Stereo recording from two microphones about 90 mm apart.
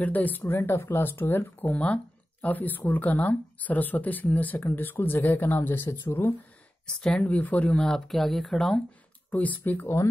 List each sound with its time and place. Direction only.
0.0 s speech: 20° left (ahead or behind)
7.0 s speech: 10° left (ahead or behind)
7.8 s speech: 5° left (ahead or behind)
9.3 s speech: 15° left (ahead or behind)